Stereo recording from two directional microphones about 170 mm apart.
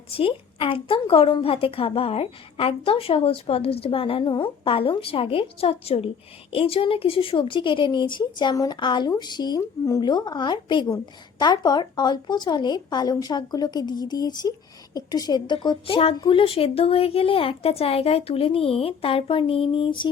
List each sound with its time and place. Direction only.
0.1 s a woman's voice: 30° left (ahead or behind)